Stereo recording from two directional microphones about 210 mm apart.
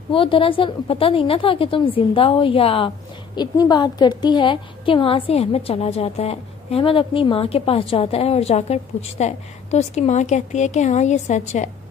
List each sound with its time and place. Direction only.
0.1 s a woman's voice: 25° left (ahead or behind)